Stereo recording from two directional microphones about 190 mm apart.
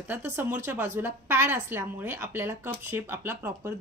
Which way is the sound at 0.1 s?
10° right (ahead or behind).